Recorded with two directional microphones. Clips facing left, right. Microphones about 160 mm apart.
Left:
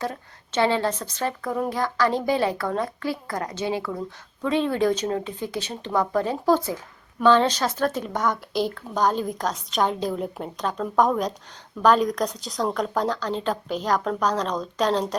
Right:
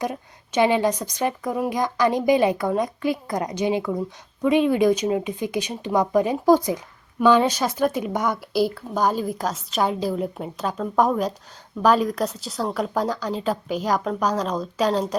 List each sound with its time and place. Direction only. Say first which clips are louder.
0.0 s a woman's voice: right 3 dB; 15° right (ahead or behind)